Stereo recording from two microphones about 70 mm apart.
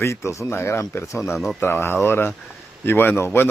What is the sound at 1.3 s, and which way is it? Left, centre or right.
Speech, centre.